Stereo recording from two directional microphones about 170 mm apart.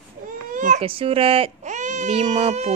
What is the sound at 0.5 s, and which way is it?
Baby cry, 45° right (ahead or behind).